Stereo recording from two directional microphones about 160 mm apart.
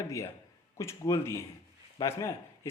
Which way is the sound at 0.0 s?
20° left (ahead or behind).